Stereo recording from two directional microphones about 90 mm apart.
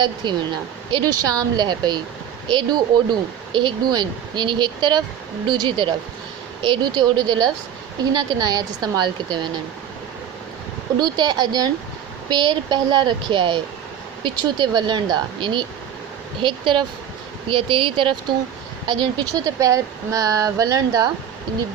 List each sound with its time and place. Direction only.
0.0 s a woman's voice: 55° right (ahead or behind)
11.0 s a woman's voice: 50° right (ahead or behind); by 18.1 s 70° right (ahead or behind)
18.9 s speech: 55° right (ahead or behind)
19.5 s speech: 40° right (ahead or behind)